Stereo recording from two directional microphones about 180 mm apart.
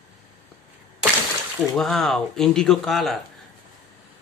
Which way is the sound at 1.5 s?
Centre (ahead or behind).